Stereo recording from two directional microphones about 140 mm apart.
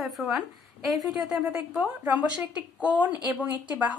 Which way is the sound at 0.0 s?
5° right (ahead or behind).